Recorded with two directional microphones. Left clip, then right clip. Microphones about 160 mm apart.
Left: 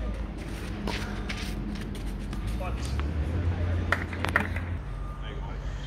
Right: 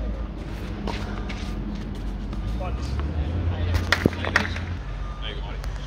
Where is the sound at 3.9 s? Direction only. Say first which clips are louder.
Right 5 dB; 40° left (ahead or behind).